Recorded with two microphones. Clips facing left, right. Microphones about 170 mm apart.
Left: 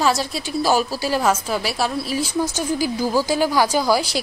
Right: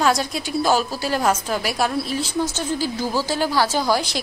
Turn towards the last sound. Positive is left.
turn(degrees=10)  # may be behind; listen again after turning